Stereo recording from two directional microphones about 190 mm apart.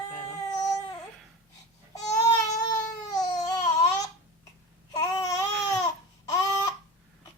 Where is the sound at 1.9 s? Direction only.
20° left (ahead or behind).